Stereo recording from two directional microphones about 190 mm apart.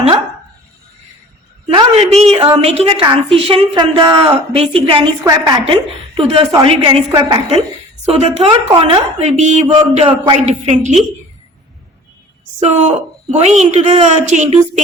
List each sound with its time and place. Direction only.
1.6 s a man's voice: 30° right (ahead or behind)
8.0 s a woman's voice: 35° right (ahead or behind)
12.5 s a woman's voice: 35° right (ahead or behind)